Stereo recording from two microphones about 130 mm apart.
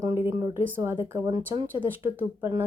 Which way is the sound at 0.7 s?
15° right (ahead or behind).